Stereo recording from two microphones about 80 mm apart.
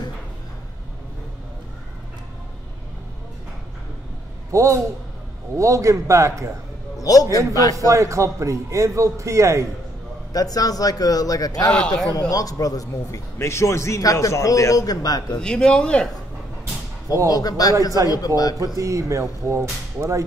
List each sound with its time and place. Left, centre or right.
4.5 s a man's voice: right
7.0 s a man's voice: left
7.9 s a man's voice: right
10.3 s a man's voice: left
11.7 s speech: centre
12.1 s a man's voice: left
15.3 s speech: centre
17.3 s a man's voice: left
18.8 s speech: right